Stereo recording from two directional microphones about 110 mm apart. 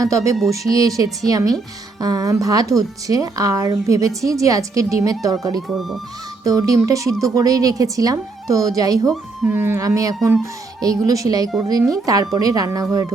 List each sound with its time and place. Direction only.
0.0 s speech: 30° right (ahead or behind)
5.5 s speech: centre (ahead or behind)
6.4 s speech: 30° right (ahead or behind)
9.4 s speech: 20° right (ahead or behind)
9.8 s speech: 30° right (ahead or behind)